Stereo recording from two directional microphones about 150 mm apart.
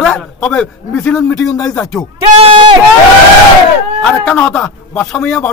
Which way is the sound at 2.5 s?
30° right (ahead or behind).